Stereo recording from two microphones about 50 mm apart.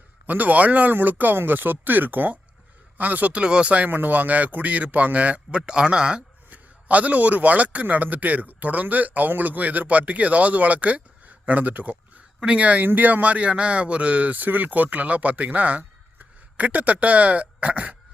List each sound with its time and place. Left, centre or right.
0.3 s a man's voice: right
3.3 s speech: right
3.8 s speech: right; by 6.2 s centre
6.5 s a man's voice: right